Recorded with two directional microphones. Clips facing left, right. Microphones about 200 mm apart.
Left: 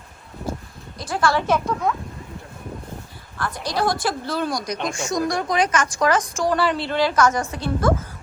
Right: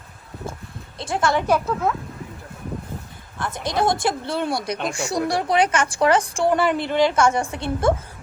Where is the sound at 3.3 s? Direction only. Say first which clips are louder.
Right 1 dB; 20° right (ahead or behind).